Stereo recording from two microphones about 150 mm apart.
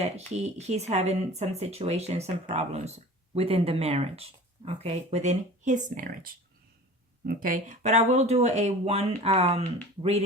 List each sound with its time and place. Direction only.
0.0 s speech: 45° right (ahead or behind)